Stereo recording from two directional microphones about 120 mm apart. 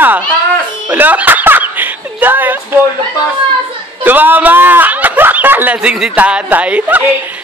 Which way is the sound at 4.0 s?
15° right (ahead or behind).